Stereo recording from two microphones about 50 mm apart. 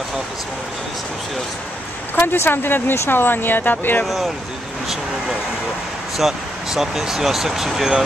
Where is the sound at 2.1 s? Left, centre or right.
Left.